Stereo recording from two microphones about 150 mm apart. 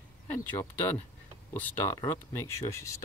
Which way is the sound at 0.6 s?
15° left (ahead or behind).